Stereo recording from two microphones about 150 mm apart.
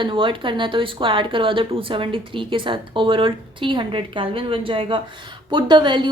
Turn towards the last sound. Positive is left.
turn(degrees=-30)  # may be behind; listen again after turning